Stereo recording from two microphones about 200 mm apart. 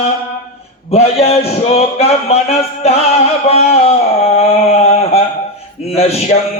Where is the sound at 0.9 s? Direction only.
30° left (ahead or behind).